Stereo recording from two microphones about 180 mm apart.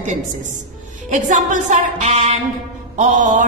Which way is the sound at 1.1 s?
45° right (ahead or behind).